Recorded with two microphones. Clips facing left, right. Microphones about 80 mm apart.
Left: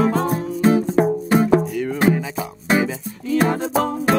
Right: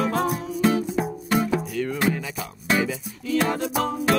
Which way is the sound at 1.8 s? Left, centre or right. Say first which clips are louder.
Left 5 dB; centre.